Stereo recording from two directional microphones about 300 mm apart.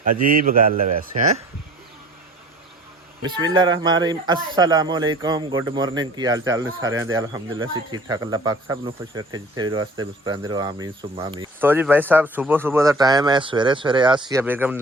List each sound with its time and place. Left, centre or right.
0.3 s a man's voice: right
3.2 s speech: centre